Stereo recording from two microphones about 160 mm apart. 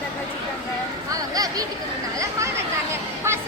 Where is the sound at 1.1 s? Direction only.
25° right (ahead or behind).